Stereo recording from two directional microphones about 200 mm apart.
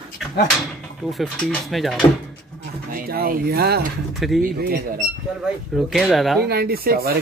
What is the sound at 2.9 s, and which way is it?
Speech, 45° right (ahead or behind).